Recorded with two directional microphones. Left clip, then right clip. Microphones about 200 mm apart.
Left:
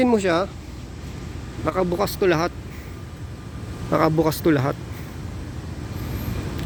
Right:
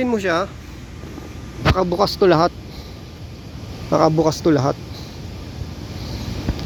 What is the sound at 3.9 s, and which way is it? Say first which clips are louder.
Speech: right 4 dB; centre (ahead or behind).